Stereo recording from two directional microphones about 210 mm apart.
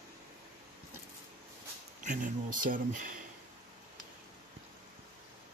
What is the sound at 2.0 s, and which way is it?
Speech, 40° right (ahead or behind).